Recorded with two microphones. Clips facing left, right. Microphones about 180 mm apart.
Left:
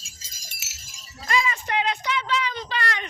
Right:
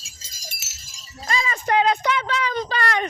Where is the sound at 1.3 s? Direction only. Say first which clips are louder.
Right 3 dB; 40° right (ahead or behind).